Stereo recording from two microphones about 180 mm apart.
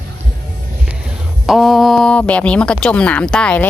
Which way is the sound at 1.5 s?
Centre (ahead or behind).